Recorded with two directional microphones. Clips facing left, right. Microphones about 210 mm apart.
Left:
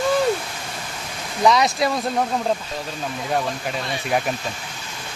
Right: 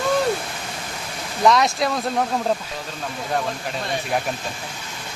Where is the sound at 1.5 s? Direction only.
Centre (ahead or behind).